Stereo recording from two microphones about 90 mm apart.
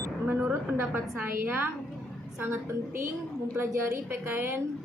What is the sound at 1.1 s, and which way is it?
A woman's voice, 20° right (ahead or behind).